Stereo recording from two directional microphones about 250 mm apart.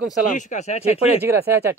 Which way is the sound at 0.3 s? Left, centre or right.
Left.